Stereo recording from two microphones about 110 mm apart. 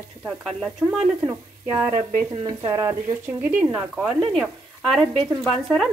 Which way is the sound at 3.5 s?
20° right (ahead or behind).